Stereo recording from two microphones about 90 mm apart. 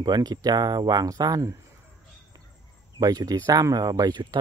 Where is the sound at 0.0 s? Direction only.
50° right (ahead or behind).